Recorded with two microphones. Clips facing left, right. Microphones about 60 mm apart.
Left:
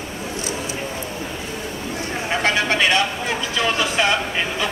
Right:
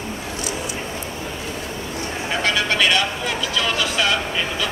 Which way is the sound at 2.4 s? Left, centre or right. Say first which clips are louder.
Even; left.